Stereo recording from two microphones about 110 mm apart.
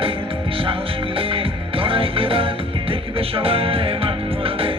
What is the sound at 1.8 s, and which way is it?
Music, 55° right (ahead or behind).